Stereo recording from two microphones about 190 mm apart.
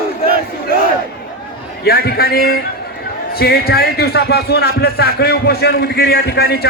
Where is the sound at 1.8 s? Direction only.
55° left (ahead or behind).